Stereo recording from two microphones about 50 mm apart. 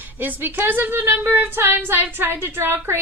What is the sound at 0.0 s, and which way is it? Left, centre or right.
A woman's voice, right.